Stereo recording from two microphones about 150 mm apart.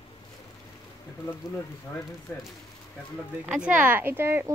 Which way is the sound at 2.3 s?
15° left (ahead or behind).